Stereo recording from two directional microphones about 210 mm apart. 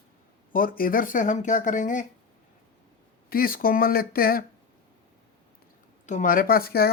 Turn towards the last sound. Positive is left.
turn(degrees=45)  # may be behind; listen again after turning